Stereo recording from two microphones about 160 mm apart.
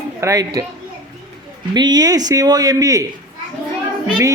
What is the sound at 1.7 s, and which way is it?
Speech, 25° right (ahead or behind).